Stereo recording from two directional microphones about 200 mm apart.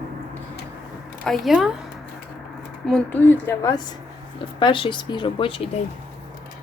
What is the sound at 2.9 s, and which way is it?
A woman's voice, 10° left (ahead or behind).